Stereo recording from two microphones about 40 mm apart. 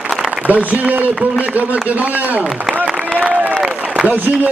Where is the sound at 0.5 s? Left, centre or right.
Right.